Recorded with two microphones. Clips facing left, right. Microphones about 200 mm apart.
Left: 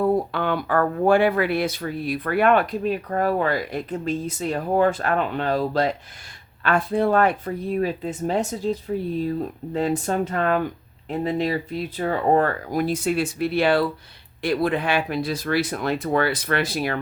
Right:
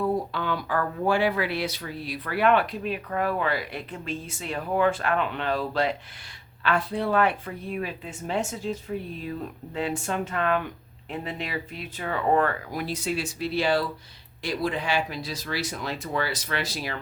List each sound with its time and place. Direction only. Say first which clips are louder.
0.0 s speech: left 5 dB; 60° left (ahead or behind)